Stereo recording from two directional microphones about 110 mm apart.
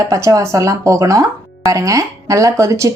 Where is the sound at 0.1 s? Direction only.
30° right (ahead or behind).